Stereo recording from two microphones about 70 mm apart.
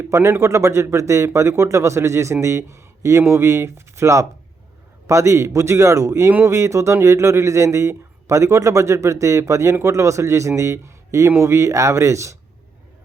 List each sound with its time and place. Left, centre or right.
0.2 s speech: right